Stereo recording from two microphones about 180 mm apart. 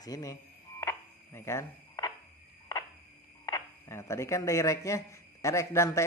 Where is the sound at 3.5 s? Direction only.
15° left (ahead or behind).